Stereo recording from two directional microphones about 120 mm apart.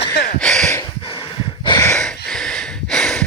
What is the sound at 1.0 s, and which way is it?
Snort, 40° left (ahead or behind).